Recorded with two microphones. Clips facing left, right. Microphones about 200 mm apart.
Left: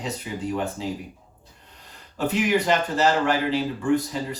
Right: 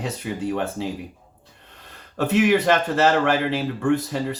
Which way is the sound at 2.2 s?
70° right (ahead or behind).